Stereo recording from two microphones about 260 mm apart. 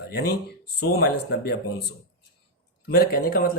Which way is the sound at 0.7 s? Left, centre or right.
Left.